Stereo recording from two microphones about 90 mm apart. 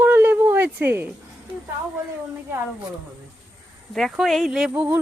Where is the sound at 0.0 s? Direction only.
20° right (ahead or behind).